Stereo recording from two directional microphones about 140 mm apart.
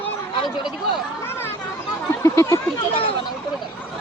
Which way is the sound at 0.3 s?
35° left (ahead or behind).